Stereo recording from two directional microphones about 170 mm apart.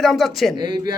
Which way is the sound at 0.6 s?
25° right (ahead or behind).